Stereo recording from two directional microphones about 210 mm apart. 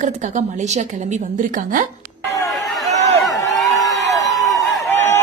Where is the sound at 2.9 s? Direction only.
15° left (ahead or behind).